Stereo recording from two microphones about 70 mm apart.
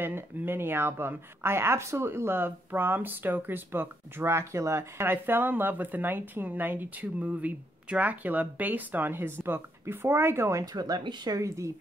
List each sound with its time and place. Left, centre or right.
0.0 s speech: right
10.6 s speech: right
11.4 s a woman's voice: right